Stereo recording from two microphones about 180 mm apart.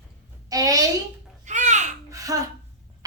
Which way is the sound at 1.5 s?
40° right (ahead or behind).